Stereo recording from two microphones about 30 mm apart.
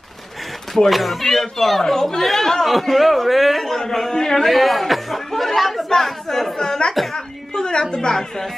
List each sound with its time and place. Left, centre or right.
0.8 s speech: centre
1.2 s speech: centre
3.6 s speech: centre
4.5 s speech: centre
5.9 s speech: centre
7.5 s a sound: left
7.8 s speech: centre